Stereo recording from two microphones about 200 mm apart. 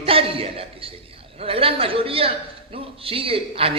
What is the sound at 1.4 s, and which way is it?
A man's voice, 30° right (ahead or behind).